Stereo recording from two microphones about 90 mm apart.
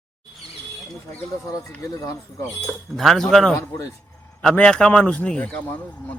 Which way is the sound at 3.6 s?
35° left (ahead or behind).